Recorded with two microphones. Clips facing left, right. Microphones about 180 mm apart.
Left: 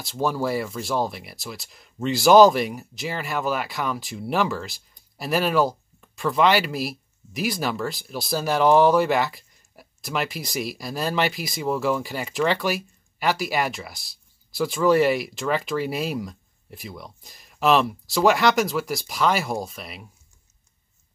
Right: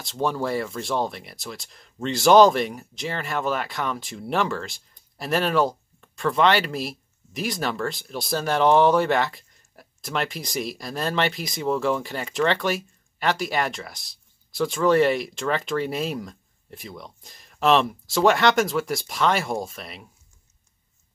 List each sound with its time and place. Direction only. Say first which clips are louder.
0.0 s speech: left 1 dB; 5° left (ahead or behind)